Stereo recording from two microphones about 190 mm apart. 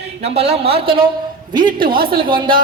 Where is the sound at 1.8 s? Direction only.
50° right (ahead or behind).